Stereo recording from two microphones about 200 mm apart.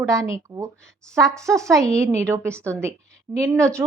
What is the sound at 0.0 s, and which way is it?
A woman's voice, 15° right (ahead or behind).